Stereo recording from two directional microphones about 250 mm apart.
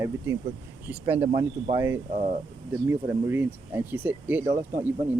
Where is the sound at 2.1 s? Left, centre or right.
Right.